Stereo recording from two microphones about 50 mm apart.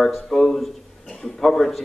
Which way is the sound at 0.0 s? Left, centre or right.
Centre.